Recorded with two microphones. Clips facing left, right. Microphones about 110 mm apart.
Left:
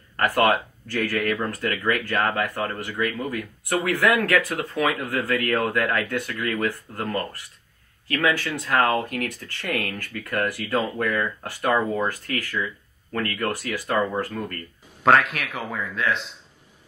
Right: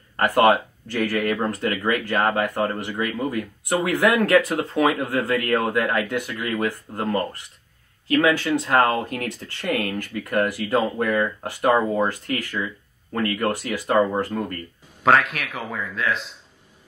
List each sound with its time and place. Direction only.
0.2 s speech: 20° right (ahead or behind)
15.0 s speech: centre (ahead or behind)